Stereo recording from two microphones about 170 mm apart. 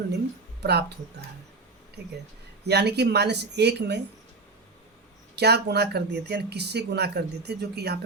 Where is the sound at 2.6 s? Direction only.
75° right (ahead or behind).